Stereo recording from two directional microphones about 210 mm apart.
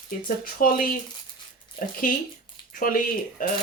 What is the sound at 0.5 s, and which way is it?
Speech, 40° left (ahead or behind).